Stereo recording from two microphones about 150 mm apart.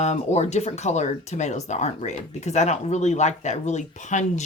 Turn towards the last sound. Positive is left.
turn(degrees=50)  # may be behind; listen again after turning